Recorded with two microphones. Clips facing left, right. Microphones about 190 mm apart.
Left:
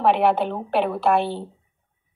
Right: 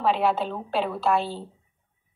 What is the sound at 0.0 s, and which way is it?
A woman's voice, 60° left (ahead or behind).